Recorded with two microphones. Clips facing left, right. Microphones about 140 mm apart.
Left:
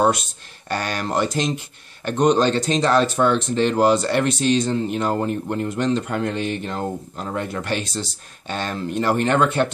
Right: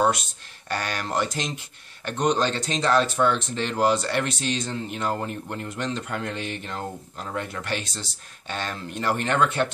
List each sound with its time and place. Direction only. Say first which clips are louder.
0.7 s speech: left 4 dB; 35° left (ahead or behind)